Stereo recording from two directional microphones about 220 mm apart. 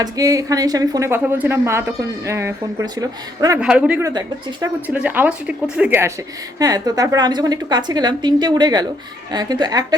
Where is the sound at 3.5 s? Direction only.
5° right (ahead or behind).